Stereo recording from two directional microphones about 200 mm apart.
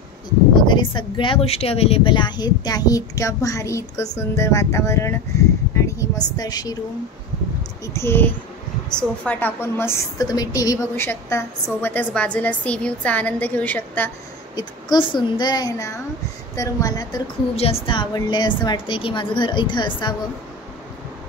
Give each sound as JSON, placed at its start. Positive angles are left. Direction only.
{"t": 0.6, "sound": "a woman's voice", "side_deg": 25}
{"t": 7.8, "sound": "a woman's voice", "side_deg": 15}
{"t": 14.5, "sound": "a woman's voice", "side_deg": 20}